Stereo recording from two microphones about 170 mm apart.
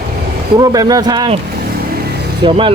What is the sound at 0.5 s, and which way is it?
Speech, 20° right (ahead or behind).